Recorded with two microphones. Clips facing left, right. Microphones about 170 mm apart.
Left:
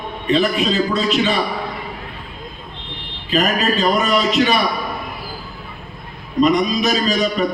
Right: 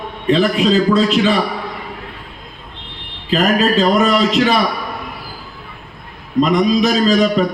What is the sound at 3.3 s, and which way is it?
A man's voice, 90° right.